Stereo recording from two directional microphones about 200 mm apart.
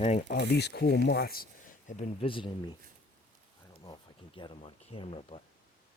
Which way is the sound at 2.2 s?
25° left (ahead or behind).